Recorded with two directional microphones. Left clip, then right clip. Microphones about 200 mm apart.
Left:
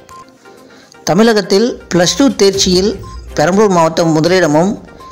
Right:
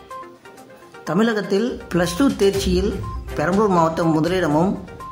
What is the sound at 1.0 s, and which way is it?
A man's voice, 30° left (ahead or behind).